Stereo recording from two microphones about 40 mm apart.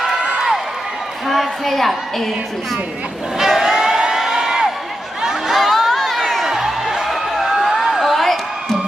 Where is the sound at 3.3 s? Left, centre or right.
Centre.